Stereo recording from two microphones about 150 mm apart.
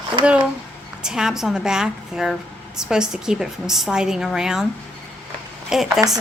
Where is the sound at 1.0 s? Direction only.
5° right (ahead or behind).